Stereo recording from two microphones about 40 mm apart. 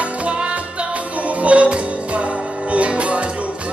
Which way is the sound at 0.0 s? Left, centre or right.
Right.